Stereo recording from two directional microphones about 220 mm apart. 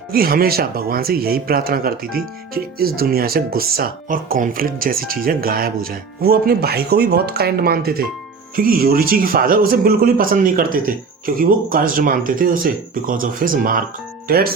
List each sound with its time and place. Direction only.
0.1 s speech: 40° right (ahead or behind)